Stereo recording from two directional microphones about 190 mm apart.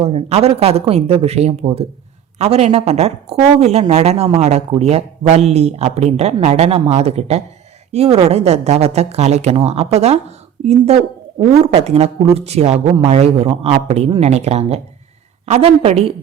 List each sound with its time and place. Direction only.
0.0 s speech: 30° right (ahead or behind)